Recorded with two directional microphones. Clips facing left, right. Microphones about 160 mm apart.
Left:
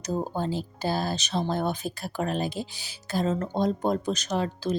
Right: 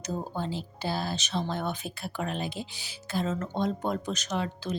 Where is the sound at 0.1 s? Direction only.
40° left (ahead or behind).